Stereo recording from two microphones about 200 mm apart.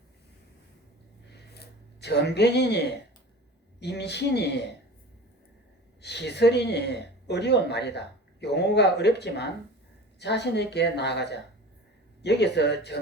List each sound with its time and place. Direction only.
1.5 s speech: 55° left (ahead or behind)
6.0 s speech: 60° left (ahead or behind)